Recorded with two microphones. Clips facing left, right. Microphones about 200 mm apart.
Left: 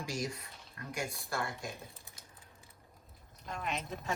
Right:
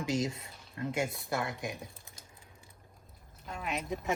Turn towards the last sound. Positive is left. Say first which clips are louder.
# right 3 dB
turn(degrees=-10)  # may be behind; listen again after turning